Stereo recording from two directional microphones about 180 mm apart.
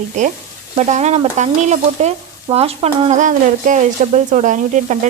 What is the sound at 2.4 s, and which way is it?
Speech, 35° right (ahead or behind).